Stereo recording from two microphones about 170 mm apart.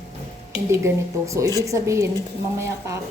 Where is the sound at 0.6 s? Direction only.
15° right (ahead or behind).